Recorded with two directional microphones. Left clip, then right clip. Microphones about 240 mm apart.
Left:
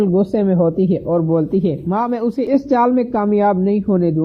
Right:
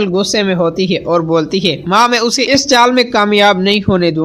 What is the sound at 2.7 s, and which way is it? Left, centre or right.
Speech, centre.